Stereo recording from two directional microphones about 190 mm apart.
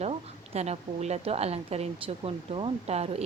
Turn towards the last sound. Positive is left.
turn(degrees=-35)  # may be behind; listen again after turning